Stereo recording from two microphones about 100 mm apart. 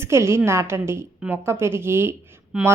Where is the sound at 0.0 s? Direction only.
25° right (ahead or behind).